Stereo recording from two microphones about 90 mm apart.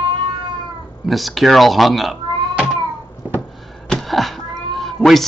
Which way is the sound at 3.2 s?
20° right (ahead or behind).